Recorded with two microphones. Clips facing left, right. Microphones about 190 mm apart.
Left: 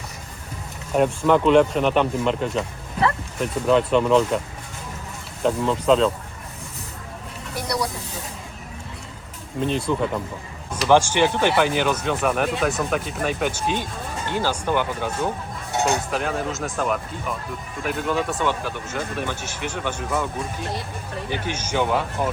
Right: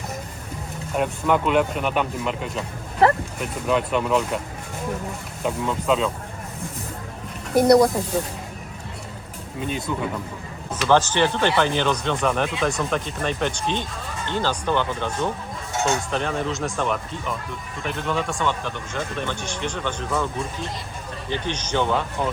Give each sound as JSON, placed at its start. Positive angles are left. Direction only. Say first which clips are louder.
{"t": 0.9, "sound": "speech", "louder": "left 4 dB", "side_deg": -5}
{"t": 3.7, "sound": "speech", "louder": "left 4 dB", "side_deg": -5}
{"t": 5.4, "sound": "speech", "louder": "left 4 dB", "side_deg": -5}
{"t": 7.5, "sound": "speech", "louder": "right 12 dB", "side_deg": -50}
{"t": 9.6, "sound": "speech", "louder": "left 4 dB", "side_deg": -5}
{"t": 10.8, "sound": "speech", "louder": "left 2 dB", "side_deg": 10}
{"t": 21.2, "sound": "speech", "louder": "right 2 dB", "side_deg": 10}